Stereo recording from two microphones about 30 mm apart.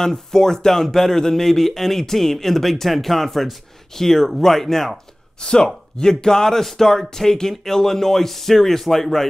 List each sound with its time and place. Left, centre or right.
0.0 s speech: centre
5.4 s speech: left; by 9.3 s centre